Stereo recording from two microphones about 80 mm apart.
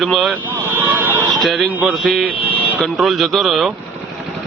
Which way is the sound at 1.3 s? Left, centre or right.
Centre.